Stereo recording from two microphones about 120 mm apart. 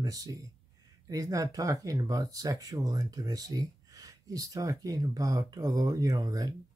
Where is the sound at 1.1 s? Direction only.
30° right (ahead or behind).